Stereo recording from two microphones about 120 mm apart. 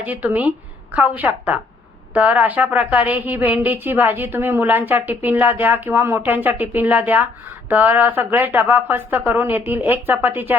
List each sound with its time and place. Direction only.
0.0 s speech: 15° right (ahead or behind)